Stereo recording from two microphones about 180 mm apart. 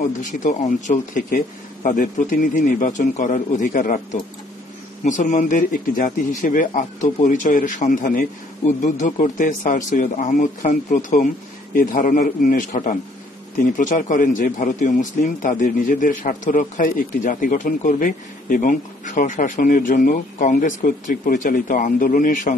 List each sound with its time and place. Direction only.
0.2 s a man's voice: 45° left (ahead or behind)